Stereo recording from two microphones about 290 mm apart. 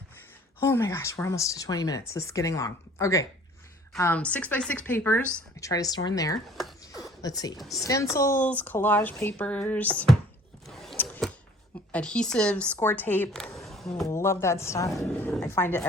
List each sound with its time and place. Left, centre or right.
0.6 s speech: centre
6.9 s a sound: centre
7.6 s speech: centre
7.9 s speech: centre
10.7 s a sound: centre
11.9 s speech: centre